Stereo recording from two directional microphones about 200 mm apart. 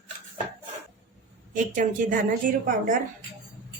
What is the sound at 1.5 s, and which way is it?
A woman's voice, 40° right (ahead or behind).